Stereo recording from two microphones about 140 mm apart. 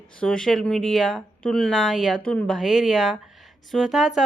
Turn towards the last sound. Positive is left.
turn(degrees=-5)  # may be behind; listen again after turning